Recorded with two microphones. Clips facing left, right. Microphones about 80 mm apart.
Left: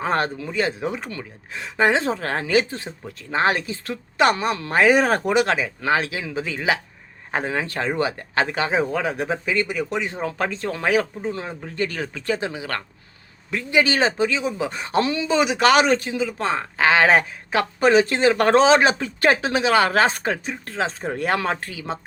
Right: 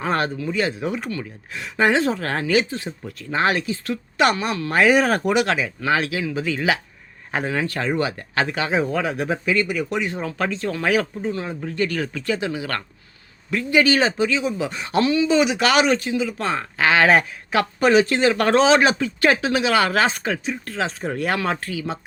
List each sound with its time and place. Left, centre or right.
0.0 s speech: left
12.5 s speech: centre; by 21.9 s left